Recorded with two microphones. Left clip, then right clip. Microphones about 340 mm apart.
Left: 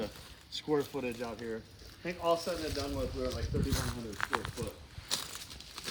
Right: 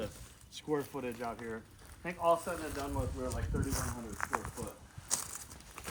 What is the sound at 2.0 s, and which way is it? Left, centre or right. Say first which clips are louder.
Speech: right 1 dB; right.